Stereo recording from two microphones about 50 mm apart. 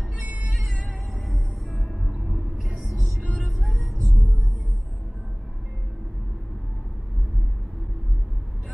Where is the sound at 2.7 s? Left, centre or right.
Centre.